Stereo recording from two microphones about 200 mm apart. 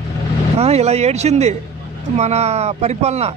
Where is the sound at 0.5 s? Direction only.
30° right (ahead or behind).